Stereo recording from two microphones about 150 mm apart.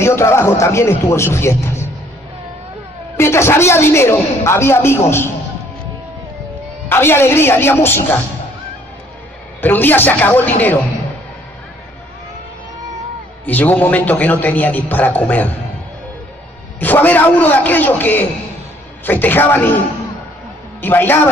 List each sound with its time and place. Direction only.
0.0 s a man's voice: 15° left (ahead or behind)
3.2 s a man's voice: 15° left (ahead or behind)
6.9 s a man's voice: 15° left (ahead or behind)
9.6 s a man's voice: 15° left (ahead or behind)
13.5 s a man's voice: 10° left (ahead or behind)
16.8 s a man's voice: 10° left (ahead or behind)
20.8 s a man's voice: 15° left (ahead or behind)